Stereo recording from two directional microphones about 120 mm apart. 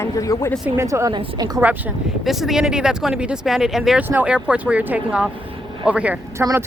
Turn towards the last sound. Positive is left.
turn(degrees=-20)  # may be behind; listen again after turning